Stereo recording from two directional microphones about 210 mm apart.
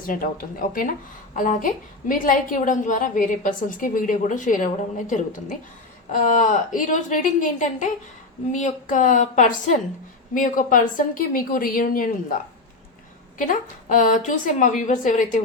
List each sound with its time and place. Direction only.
0.1 s a woman's voice: 40° left (ahead or behind)
13.4 s a woman's voice: 40° left (ahead or behind)